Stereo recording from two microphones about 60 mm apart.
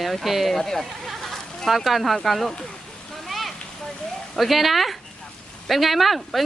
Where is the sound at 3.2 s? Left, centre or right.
Centre.